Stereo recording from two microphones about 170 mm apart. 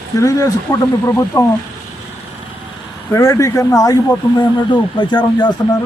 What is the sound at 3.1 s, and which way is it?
Speech, 20° left (ahead or behind).